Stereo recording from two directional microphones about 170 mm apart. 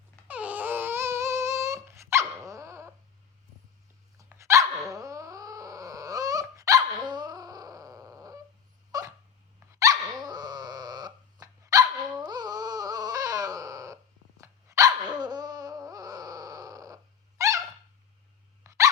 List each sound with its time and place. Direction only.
0.3 s babbling: 10° right (ahead or behind)
4.3 s dog: 15° right (ahead or behind)
15.2 s a sound: 25° right (ahead or behind)
18.6 s dog: 15° right (ahead or behind)